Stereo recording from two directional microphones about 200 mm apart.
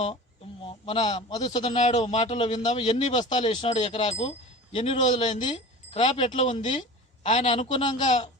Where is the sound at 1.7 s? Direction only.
35° left (ahead or behind).